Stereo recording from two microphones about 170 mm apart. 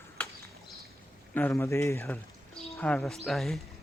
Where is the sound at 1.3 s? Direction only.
15° left (ahead or behind).